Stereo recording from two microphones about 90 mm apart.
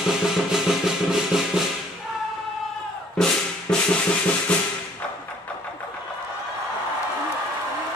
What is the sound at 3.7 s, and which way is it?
Drum, 10° left (ahead or behind).